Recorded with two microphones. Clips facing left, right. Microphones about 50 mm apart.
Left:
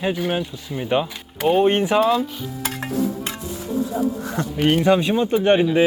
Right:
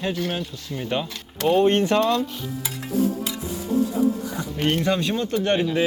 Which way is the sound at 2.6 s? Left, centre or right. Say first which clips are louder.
Left 4 dB; left.